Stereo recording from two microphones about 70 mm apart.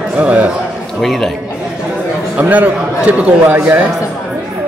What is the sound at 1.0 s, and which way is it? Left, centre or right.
Speech, centre.